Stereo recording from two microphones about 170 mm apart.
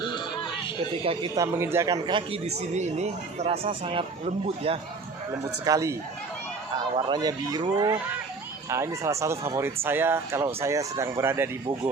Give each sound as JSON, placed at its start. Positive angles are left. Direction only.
{"t": 1.0, "sound": "a man's voice", "side_deg": -30}
{"t": 1.4, "sound": "a man's voice", "side_deg": -15}
{"t": 5.6, "sound": "speech", "side_deg": -20}
{"t": 8.7, "sound": "speech", "side_deg": -15}